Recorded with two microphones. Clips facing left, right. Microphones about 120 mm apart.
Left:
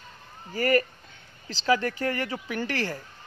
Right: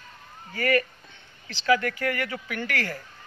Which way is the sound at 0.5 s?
35° left (ahead or behind).